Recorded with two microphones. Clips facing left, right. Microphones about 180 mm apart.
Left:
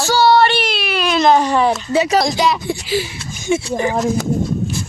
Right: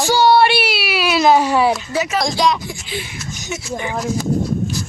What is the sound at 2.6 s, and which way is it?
Speech, 35° left (ahead or behind).